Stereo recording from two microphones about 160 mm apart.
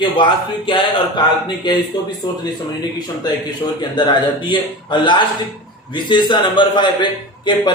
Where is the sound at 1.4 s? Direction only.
30° left (ahead or behind).